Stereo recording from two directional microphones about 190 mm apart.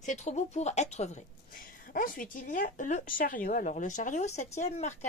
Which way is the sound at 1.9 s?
45° left (ahead or behind).